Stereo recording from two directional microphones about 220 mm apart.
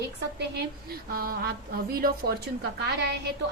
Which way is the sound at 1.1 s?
40° right (ahead or behind).